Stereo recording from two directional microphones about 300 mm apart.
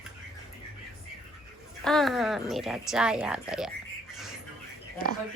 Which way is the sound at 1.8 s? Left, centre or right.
Centre.